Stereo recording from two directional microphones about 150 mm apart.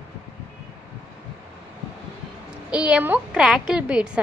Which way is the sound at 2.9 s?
10° right (ahead or behind).